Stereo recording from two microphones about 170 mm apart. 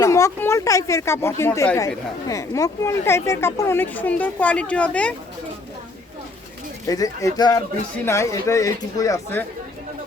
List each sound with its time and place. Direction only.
0.0 s speech: 20° left (ahead or behind)
6.8 s speech: 20° left (ahead or behind)